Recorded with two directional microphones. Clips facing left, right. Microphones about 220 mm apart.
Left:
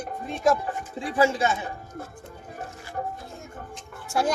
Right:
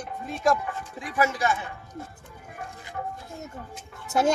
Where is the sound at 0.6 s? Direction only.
30° left (ahead or behind).